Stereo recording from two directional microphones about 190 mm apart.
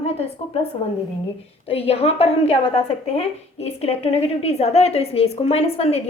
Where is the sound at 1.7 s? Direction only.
30° left (ahead or behind).